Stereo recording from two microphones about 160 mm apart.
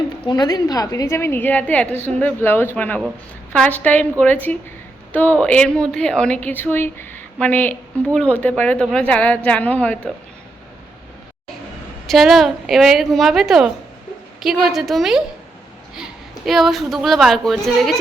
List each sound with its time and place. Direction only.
0.3 s a woman's voice: 25° left (ahead or behind); by 10.1 s 10° left (ahead or behind)
12.0 s a woman's voice: centre (ahead or behind)
16.5 s a woman's voice: centre (ahead or behind)